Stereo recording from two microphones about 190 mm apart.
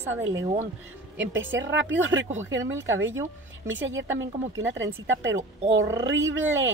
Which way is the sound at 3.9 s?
85° right.